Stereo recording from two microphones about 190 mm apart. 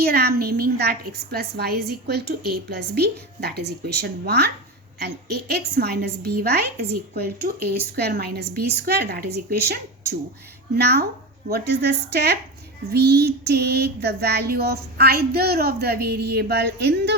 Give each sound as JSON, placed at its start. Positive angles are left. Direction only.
{"t": 0.0, "sound": "a woman's voice", "side_deg": -55}
{"t": 10.8, "sound": "a woman's voice", "side_deg": -60}